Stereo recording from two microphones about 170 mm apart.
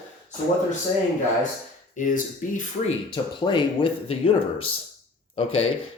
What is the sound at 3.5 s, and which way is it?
Speech, 30° left (ahead or behind).